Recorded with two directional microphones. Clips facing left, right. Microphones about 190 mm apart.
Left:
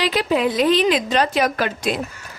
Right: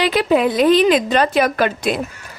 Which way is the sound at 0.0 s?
55° right (ahead or behind).